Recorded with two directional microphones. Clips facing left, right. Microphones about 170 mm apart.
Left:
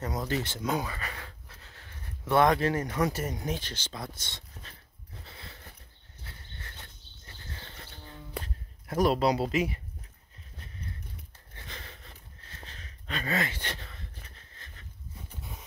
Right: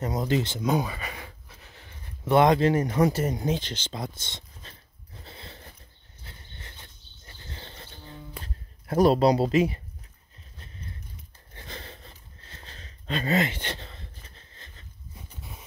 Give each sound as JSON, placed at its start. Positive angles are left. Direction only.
{"t": 0.0, "sound": "speech", "side_deg": -20}
{"t": 5.2, "sound": "biting", "side_deg": -30}
{"t": 7.4, "sound": "cricket", "side_deg": -25}
{"t": 8.8, "sound": "speech", "side_deg": -30}
{"t": 11.5, "sound": "a sound", "side_deg": -30}